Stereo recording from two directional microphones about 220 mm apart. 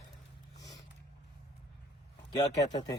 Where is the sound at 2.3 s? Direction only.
20° left (ahead or behind).